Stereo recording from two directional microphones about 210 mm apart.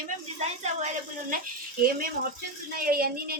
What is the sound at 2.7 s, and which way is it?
Speech, 45° right (ahead or behind).